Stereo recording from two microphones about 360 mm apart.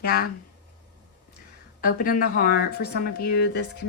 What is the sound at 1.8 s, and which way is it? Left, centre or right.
Speech, left.